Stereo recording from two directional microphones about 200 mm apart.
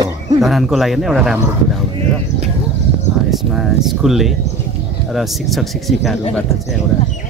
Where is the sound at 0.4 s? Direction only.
Centre (ahead or behind).